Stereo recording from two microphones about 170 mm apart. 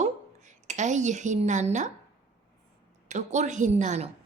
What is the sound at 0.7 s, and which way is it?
A woman's voice, 45° right (ahead or behind).